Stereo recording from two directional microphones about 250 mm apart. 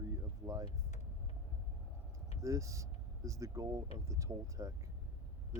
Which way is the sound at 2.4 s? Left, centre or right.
Centre.